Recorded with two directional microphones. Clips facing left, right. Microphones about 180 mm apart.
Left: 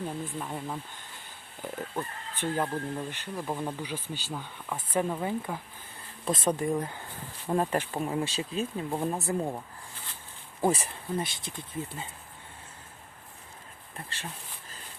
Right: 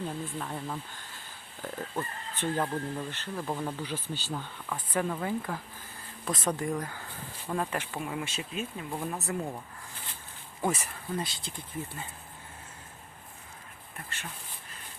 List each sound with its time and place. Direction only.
0.0 s speech: 10° left (ahead or behind); by 9.6 s 25° left (ahead or behind)
10.6 s speech: 30° left (ahead or behind)
13.9 s speech: 30° left (ahead or behind)